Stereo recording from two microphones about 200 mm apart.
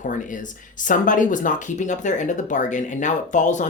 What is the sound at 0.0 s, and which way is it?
Speech, 40° left (ahead or behind).